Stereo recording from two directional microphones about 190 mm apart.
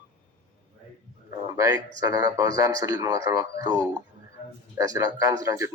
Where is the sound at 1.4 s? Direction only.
20° right (ahead or behind).